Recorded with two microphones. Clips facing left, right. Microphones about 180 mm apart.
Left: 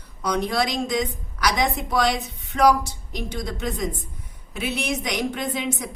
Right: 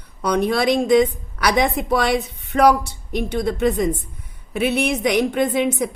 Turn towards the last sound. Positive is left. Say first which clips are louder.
# right 8 dB
turn(degrees=-60)  # may be behind; listen again after turning